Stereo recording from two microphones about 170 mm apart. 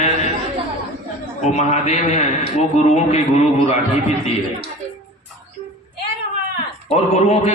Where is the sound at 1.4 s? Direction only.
40° left (ahead or behind).